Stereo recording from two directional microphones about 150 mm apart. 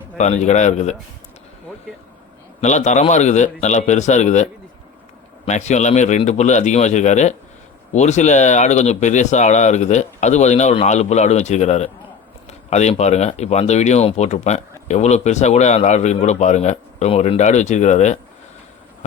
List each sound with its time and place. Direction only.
0.2 s speech: 50° left (ahead or behind)
2.6 s speech: 50° left (ahead or behind)
5.5 s speech: 50° left (ahead or behind)